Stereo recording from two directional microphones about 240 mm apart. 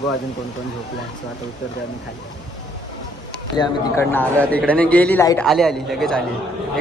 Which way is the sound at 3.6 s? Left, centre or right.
Centre.